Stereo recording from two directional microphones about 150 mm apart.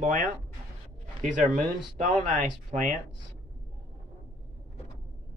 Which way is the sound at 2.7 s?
60° right (ahead or behind).